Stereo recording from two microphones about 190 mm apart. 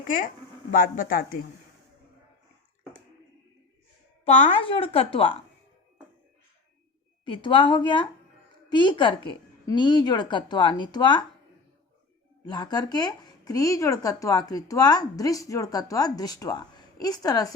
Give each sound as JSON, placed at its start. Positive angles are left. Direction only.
{"t": 0.7, "sound": "a man's voice", "side_deg": 50}
{"t": 4.3, "sound": "speech", "side_deg": 40}
{"t": 7.3, "sound": "speech", "side_deg": 25}
{"t": 12.5, "sound": "speech", "side_deg": 20}